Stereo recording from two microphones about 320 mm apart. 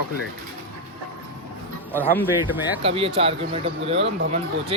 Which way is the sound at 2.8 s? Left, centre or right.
Centre.